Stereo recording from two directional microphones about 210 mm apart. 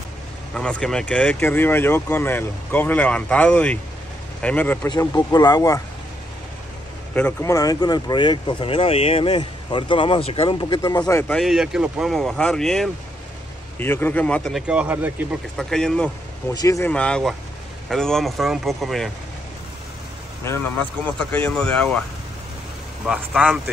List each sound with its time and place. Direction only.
0.6 s speech: 5° left (ahead or behind)
4.8 s speech: 20° left (ahead or behind)
7.2 s speech: 10° left (ahead or behind)
16.5 s speech: 15° left (ahead or behind)
21.2 s speech: 5° left (ahead or behind)
23.0 s speech: 5° right (ahead or behind)